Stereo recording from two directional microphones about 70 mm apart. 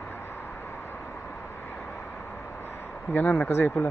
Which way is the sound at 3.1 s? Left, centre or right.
Left.